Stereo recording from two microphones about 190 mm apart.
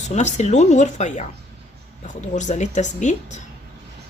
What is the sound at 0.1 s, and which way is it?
Speech, 40° left (ahead or behind).